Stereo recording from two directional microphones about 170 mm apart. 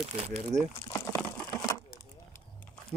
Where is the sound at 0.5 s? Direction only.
20° right (ahead or behind).